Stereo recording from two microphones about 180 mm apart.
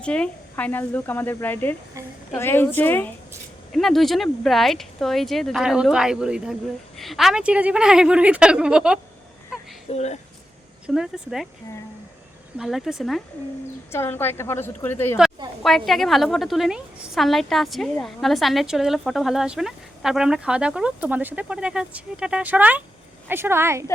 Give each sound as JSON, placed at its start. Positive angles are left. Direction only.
{"t": 0.0, "sound": "speech", "side_deg": 5}
{"t": 9.9, "sound": "speech", "side_deg": 40}
{"t": 10.8, "sound": "speech", "side_deg": -5}
{"t": 12.5, "sound": "speech", "side_deg": 0}
{"t": 13.9, "sound": "speech", "side_deg": 15}
{"t": 15.9, "sound": "a woman's voice", "side_deg": 0}